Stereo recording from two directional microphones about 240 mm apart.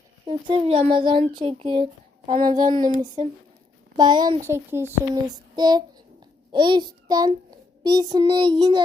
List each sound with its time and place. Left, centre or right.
0.3 s speech: right
6.5 s child singing: centre
7.9 s speech: centre